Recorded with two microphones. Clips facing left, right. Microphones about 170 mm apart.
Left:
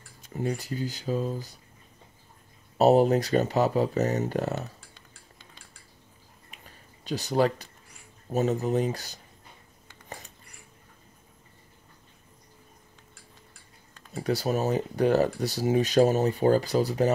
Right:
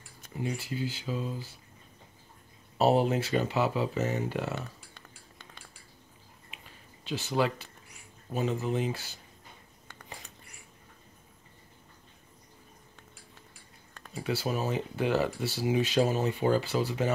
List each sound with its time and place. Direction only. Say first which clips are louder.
0.3 s speech: left 4 dB; 45° left (ahead or behind)
2.8 s speech: left 5 dB; 40° left (ahead or behind)
4.9 s cutlery: right 2 dB; 60° right (ahead or behind)
6.5 s a sound: left 1 dB; 40° left (ahead or behind)
8.3 s speech: left 5 dB; 40° left (ahead or behind)
14.1 s speech: left 5 dB; 40° left (ahead or behind)